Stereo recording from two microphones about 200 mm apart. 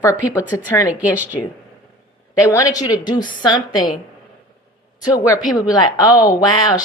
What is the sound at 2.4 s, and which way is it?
A woman's voice, 15° left (ahead or behind).